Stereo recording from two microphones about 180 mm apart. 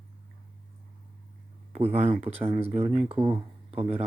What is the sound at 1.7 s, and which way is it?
Speech, 40° right (ahead or behind).